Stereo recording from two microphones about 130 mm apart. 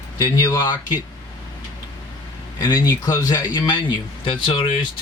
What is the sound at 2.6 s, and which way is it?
Speech, 30° left (ahead or behind).